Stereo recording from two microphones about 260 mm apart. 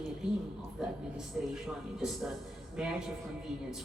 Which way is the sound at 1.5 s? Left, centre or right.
Centre.